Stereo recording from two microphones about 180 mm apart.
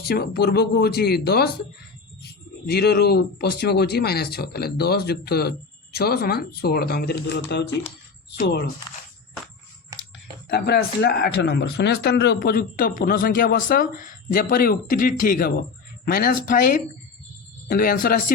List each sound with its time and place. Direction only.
0.0 s speech: 60° left (ahead or behind)
10.5 s speech: 60° left (ahead or behind)